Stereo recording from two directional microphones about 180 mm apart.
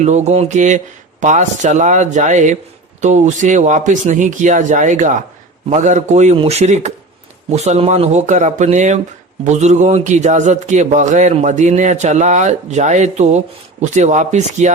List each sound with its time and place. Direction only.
0.0 s a man's voice: 40° right (ahead or behind)